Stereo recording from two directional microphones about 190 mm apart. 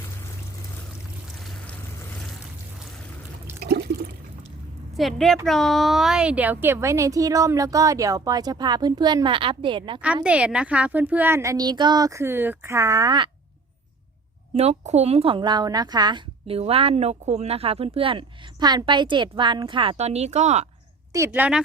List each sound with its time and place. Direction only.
3.6 s water: 55° right (ahead or behind)
4.9 s a woman's voice: centre (ahead or behind); by 10.0 s 25° right (ahead or behind)
10.2 s a woman's voice: 5° right (ahead or behind); by 13.3 s 20° right (ahead or behind)
14.5 s a woman's voice: 35° right (ahead or behind)
21.2 s a woman's voice: 5° right (ahead or behind)